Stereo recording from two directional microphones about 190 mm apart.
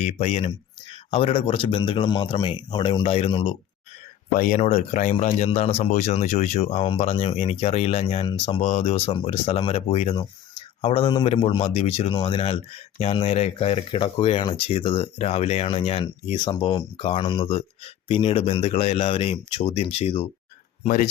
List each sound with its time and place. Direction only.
0.0 s speech: 35° left (ahead or behind)
4.4 s speech: 45° left (ahead or behind)